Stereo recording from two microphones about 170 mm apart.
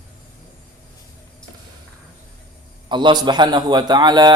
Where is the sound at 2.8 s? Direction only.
25° right (ahead or behind).